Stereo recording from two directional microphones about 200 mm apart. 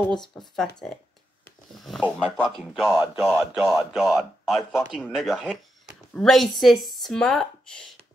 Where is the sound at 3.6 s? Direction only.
Centre (ahead or behind).